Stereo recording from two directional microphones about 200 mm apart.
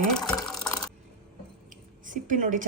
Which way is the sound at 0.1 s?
Centre (ahead or behind).